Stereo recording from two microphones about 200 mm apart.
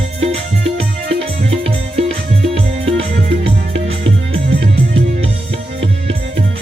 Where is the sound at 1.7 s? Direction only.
30° right (ahead or behind).